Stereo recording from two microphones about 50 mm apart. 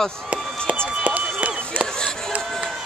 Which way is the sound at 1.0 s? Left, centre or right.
Right.